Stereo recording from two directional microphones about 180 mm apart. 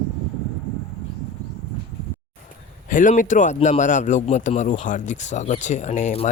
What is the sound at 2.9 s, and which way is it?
A man's voice, 45° left (ahead or behind).